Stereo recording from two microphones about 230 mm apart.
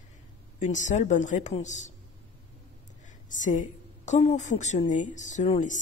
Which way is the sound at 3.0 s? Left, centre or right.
Left.